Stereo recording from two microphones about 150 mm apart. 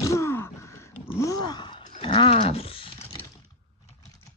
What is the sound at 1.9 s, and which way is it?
Roaring cats, 35° left (ahead or behind).